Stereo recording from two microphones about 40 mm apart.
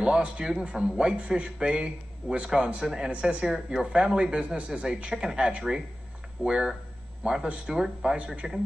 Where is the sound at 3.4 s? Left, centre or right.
Centre.